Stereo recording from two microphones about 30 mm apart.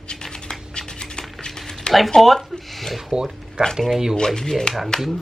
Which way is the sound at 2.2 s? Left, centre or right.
Centre.